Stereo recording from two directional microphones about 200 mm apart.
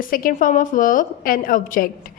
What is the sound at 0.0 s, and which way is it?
A woman's voice, 45° left (ahead or behind).